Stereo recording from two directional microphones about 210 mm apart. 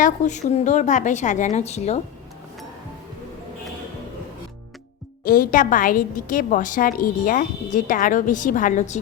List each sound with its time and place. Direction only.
0.0 s a woman's voice: 35° left (ahead or behind)
5.2 s a woman's voice: 40° left (ahead or behind)